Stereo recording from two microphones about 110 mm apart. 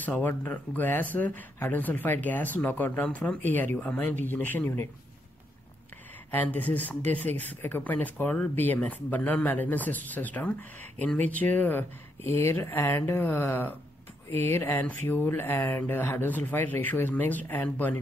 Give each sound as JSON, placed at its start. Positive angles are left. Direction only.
{"t": 0.0, "sound": "speech", "side_deg": 15}
{"t": 6.3, "sound": "speech", "side_deg": 15}